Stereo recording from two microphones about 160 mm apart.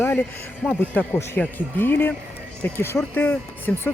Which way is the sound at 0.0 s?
15° left (ahead or behind).